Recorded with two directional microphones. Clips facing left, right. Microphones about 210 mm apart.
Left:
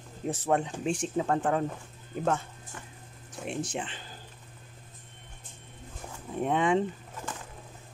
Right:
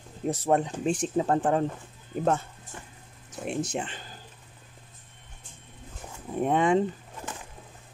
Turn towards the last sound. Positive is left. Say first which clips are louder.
# right 3 dB
turn(degrees=-45)  # may be behind; listen again after turning